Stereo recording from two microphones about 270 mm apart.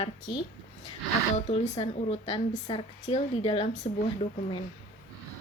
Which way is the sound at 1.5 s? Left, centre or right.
Left.